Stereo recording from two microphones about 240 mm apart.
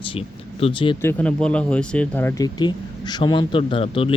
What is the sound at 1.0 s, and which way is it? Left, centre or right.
Speech, centre.